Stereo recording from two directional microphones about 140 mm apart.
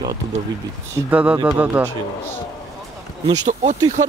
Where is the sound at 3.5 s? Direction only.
60° right (ahead or behind).